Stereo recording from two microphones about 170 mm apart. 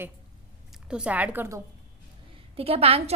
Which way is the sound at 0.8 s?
5° right (ahead or behind).